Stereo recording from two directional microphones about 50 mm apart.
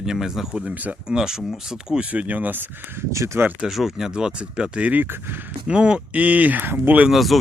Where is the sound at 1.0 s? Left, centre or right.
Centre.